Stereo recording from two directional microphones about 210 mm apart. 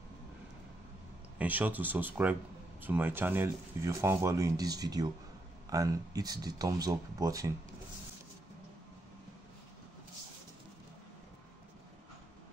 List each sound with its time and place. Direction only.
1.4 s speech: 10° right (ahead or behind)